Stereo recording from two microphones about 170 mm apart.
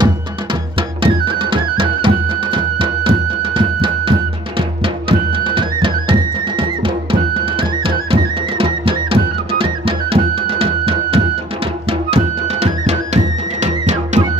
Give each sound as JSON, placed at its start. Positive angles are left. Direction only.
{"t": 0.0, "sound": "music", "side_deg": -30}